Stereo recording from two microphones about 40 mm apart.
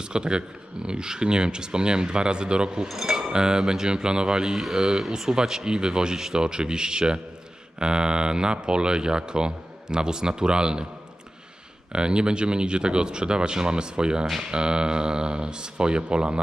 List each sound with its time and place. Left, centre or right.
0.0 s speech: right
2.9 s a sound: centre
3.3 s speech: centre
11.9 s speech: right